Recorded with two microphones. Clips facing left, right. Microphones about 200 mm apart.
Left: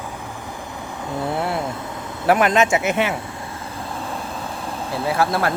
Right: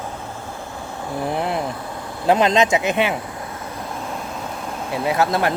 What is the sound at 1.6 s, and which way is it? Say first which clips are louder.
Vehicle: even; 20° left (ahead or behind).